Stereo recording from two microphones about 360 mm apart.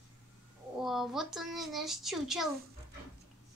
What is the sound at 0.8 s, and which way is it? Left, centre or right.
A woman's voice, centre.